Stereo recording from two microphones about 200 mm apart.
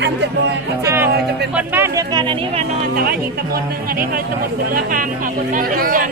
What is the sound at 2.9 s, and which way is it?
Speech, 45° right (ahead or behind).